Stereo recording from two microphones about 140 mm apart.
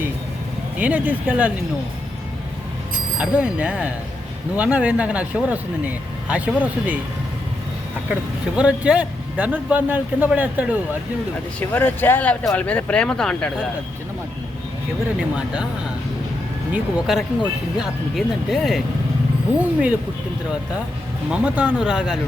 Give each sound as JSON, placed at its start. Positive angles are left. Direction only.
{"t": 0.8, "sound": "speech", "side_deg": -10}
{"t": 3.2, "sound": "speech", "side_deg": -10}
{"t": 8.1, "sound": "speech", "side_deg": -10}
{"t": 11.6, "sound": "speech", "side_deg": 15}
{"t": 16.7, "sound": "speech", "side_deg": -5}
{"t": 21.2, "sound": "speech", "side_deg": -10}